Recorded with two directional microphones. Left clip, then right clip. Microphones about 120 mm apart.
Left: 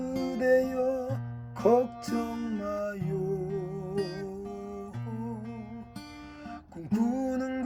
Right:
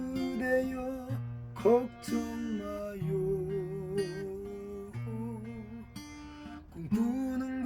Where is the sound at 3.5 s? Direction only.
40° left (ahead or behind).